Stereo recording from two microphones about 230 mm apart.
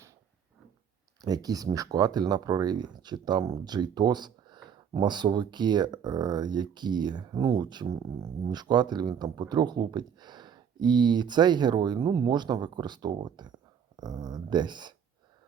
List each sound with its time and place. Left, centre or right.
1.2 s speech: centre